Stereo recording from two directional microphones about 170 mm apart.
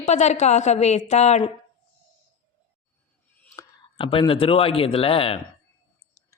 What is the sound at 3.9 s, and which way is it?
A woman's voice, 30° left (ahead or behind).